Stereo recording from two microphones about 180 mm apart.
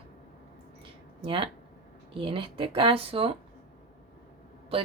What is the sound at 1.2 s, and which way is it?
Speech, 30° right (ahead or behind).